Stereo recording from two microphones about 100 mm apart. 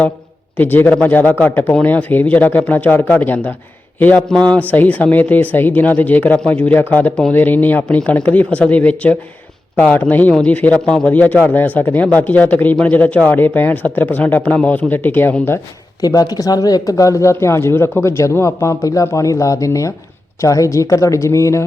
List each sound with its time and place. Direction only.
0.5 s a man's voice: 20° left (ahead or behind)
16.0 s a man's voice: 40° left (ahead or behind)